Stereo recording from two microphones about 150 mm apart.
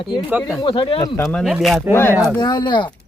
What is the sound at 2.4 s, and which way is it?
Speech, 30° left (ahead or behind).